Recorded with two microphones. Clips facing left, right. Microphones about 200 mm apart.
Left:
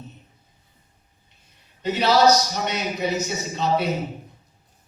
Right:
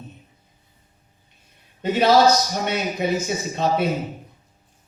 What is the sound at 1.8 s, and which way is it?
A man's voice, 50° right (ahead or behind).